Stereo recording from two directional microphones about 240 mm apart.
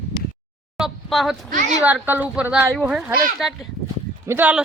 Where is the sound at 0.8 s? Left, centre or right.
Centre.